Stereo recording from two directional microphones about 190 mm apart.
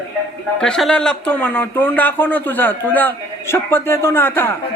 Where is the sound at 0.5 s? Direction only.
5° left (ahead or behind).